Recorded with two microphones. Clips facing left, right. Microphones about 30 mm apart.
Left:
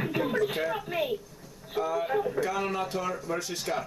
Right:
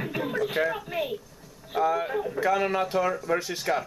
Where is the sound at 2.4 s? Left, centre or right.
Centre.